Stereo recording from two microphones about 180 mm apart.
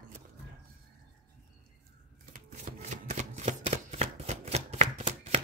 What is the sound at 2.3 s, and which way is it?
Shuffling cards, 50° right (ahead or behind).